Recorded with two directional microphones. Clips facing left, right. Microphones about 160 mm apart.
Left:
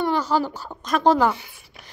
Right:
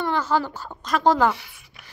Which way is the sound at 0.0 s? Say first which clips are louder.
Left 2 dB; 15° left (ahead or behind).